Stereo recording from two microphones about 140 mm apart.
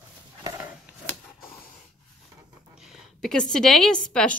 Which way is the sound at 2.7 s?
5° right (ahead or behind).